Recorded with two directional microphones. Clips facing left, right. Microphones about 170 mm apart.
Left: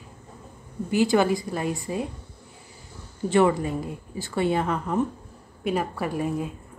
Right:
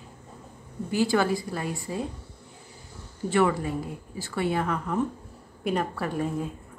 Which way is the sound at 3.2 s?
25° left (ahead or behind).